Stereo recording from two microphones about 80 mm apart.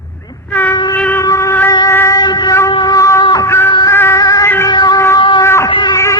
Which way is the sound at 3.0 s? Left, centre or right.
Left.